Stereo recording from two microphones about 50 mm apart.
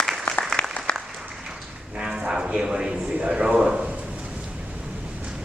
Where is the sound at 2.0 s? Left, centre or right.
Centre.